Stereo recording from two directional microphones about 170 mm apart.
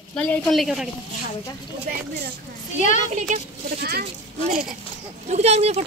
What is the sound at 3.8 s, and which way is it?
Speech, 60° right (ahead or behind).